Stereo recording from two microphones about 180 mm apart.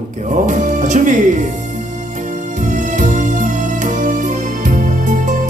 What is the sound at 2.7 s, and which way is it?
Music, 45° right (ahead or behind).